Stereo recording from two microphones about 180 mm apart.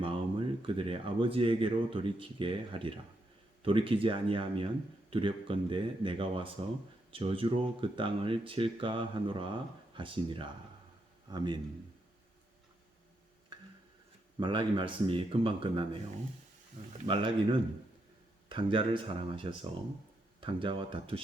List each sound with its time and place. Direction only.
0.0 s speech: 30° right (ahead or behind)
14.3 s speech: 25° right (ahead or behind)
17.1 s speech: 25° right (ahead or behind)